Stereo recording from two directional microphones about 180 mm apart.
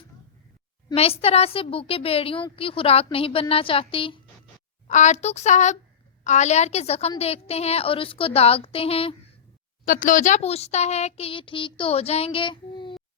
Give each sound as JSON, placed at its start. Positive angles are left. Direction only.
{"t": 0.9, "sound": "speech", "side_deg": 35}
{"t": 4.9, "sound": "speech", "side_deg": 40}
{"t": 9.8, "sound": "speech", "side_deg": 50}